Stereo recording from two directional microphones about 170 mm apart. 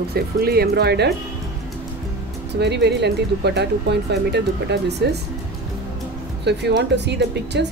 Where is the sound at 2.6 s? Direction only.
80° right.